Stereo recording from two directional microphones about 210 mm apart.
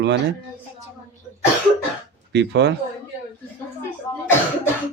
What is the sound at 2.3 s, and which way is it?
Speech, 55° right (ahead or behind).